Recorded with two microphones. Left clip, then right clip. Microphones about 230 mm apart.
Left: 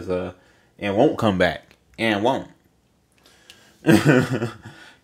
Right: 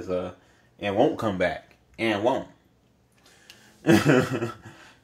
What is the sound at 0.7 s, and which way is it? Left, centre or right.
Speech, left.